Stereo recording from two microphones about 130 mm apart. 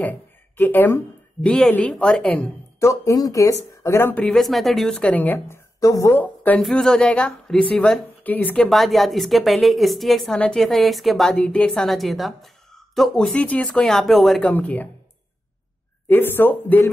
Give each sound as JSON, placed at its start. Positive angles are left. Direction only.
{"t": 0.0, "sound": "a woman's voice", "side_deg": 15}
{"t": 2.8, "sound": "speech", "side_deg": 25}
{"t": 6.2, "sound": "a woman's voice", "side_deg": 10}
{"t": 8.6, "sound": "a woman's voice", "side_deg": 0}
{"t": 14.5, "sound": "speech", "side_deg": 10}
{"t": 16.1, "sound": "speech", "side_deg": 15}